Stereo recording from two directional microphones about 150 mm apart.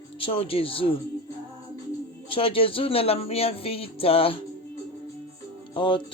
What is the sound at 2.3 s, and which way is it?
Speech, 35° left (ahead or behind).